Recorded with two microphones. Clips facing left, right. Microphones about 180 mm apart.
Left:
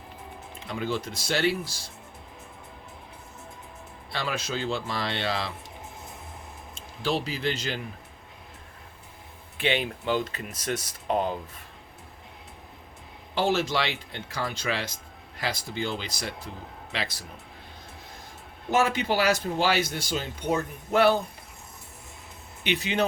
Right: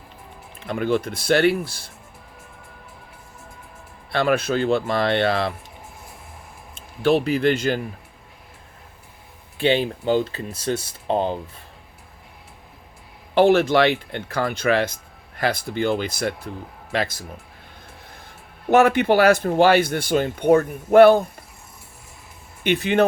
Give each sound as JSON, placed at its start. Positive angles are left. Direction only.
{"t": 0.7, "sound": "speech", "side_deg": -60}
{"t": 4.1, "sound": "speech", "side_deg": -60}
{"t": 6.7, "sound": "speech", "side_deg": -60}
{"t": 9.6, "sound": "speech", "side_deg": -30}
{"t": 13.3, "sound": "speech", "side_deg": -60}
{"t": 18.7, "sound": "speech", "side_deg": -60}
{"t": 22.6, "sound": "speech", "side_deg": -55}